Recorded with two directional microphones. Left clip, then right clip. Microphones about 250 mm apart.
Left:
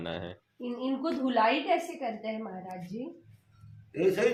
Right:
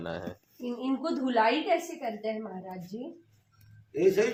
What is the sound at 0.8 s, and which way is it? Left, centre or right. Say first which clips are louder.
A woman's voice: even; right.